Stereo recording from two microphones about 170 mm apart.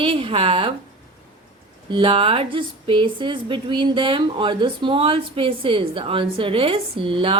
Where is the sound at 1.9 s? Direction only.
30° right (ahead or behind).